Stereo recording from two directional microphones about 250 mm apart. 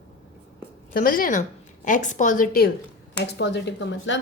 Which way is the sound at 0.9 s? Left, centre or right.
Left.